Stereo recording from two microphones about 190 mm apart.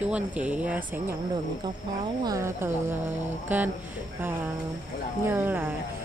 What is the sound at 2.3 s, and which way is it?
Speech, 15° right (ahead or behind).